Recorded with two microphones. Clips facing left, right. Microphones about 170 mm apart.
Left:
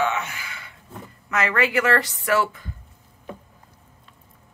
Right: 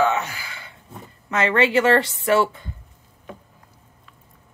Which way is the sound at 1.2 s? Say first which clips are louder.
Right 3 dB; 30° right (ahead or behind).